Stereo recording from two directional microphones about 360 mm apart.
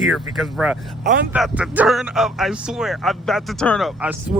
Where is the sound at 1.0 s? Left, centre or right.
Right.